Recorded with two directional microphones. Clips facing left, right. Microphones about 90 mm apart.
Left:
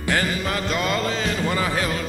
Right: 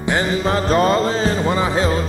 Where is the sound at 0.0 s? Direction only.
20° right (ahead or behind).